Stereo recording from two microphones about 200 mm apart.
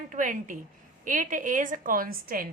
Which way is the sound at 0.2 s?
40° right (ahead or behind).